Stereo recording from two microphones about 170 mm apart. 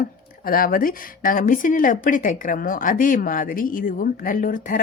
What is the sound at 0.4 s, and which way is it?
Speech, 60° left (ahead or behind).